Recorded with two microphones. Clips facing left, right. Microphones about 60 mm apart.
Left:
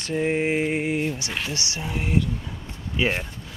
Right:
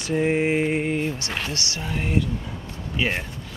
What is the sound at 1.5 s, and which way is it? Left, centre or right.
Speech, centre.